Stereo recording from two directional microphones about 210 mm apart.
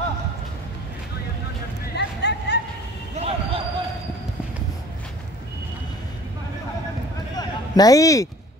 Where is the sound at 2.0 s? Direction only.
55° left (ahead or behind).